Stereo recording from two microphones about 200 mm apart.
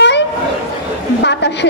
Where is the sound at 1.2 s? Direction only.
60° left (ahead or behind).